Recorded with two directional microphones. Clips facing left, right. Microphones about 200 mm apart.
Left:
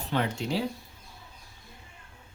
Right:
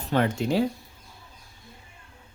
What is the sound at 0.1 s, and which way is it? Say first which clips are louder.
Speech: right 5 dB; 50° right (ahead or behind).